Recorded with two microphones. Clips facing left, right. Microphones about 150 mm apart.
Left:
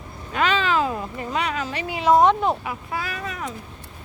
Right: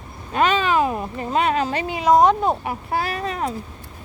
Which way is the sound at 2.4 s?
35° right (ahead or behind).